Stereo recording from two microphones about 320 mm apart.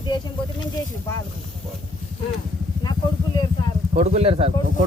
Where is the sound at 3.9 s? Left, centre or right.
Centre.